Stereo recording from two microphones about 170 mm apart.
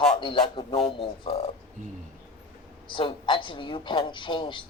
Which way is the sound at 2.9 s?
30° left (ahead or behind).